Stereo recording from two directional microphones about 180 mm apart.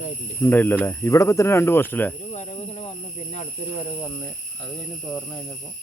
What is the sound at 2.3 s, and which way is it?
Snake, 40° left (ahead or behind).